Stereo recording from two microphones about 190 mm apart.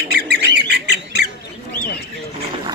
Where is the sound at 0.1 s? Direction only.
60° right (ahead or behind).